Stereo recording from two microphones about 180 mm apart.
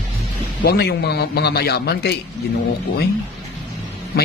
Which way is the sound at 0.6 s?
65° left (ahead or behind).